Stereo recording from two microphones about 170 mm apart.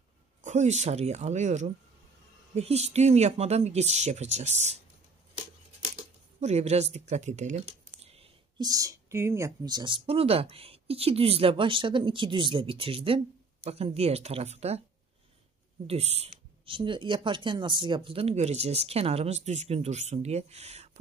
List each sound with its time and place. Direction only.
0.4 s speech: 45° right (ahead or behind)
5.9 s a sound: 40° right (ahead or behind)
8.5 s speech: 20° right (ahead or behind); by 14.8 s 40° right (ahead or behind)
15.9 s speech: 35° right (ahead or behind)